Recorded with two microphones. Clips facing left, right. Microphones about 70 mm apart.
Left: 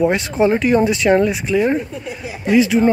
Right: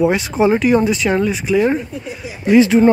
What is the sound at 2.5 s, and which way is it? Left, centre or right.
Speech, right.